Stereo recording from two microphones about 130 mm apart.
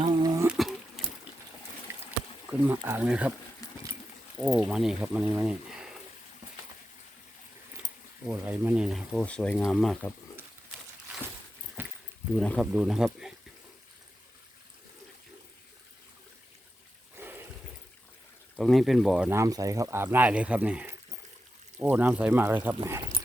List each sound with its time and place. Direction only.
0.0 s a sound: 30° right (ahead or behind)
0.4 s a sound: 5° right (ahead or behind)
2.0 s a sound: 10° right (ahead or behind)
2.8 s speech: 15° right (ahead or behind)
4.4 s speech: 15° right (ahead or behind)
8.3 s speech: 15° right (ahead or behind)
9.2 s speech: 10° left (ahead or behind)
11.8 s keys jangling: 15° right (ahead or behind)
12.4 s speech: 5° left (ahead or behind)
12.7 s speech: 5° right (ahead or behind)
17.2 s a sound: 15° right (ahead or behind)
18.5 s speech: centre (ahead or behind)
19.3 s speech: 25° right (ahead or behind)